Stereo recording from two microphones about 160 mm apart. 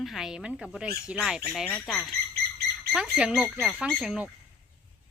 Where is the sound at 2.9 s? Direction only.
5° right (ahead or behind).